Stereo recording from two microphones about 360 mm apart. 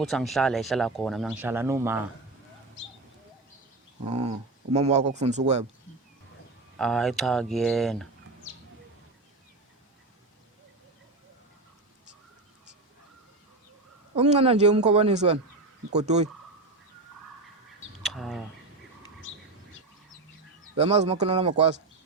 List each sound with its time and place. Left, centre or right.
0.0 s speech: centre
4.0 s speech: centre
6.7 s speech: centre
14.2 s speech: centre
18.0 s bird: centre
20.7 s speech: centre